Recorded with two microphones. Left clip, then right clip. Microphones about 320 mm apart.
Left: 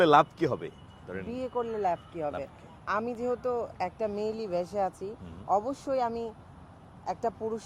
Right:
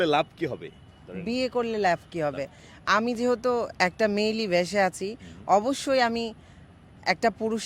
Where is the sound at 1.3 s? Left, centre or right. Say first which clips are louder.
Right 6 dB; right.